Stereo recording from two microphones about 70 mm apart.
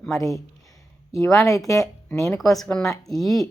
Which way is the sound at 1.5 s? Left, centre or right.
Left.